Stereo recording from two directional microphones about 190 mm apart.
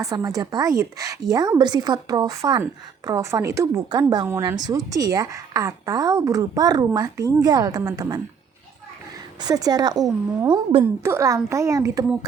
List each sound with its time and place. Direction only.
0.0 s a woman's voice: 15° right (ahead or behind)
9.4 s a woman's voice: 20° right (ahead or behind)
10.8 s speech: 15° right (ahead or behind)